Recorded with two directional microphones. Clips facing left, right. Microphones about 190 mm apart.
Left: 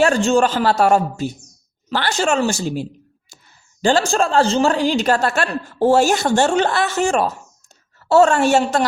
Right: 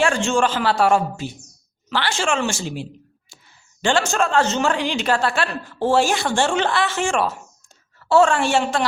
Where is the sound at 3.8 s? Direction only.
35° left (ahead or behind).